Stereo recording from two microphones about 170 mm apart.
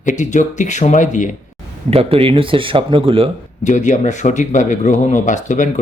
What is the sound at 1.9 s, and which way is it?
Speech, 35° right (ahead or behind).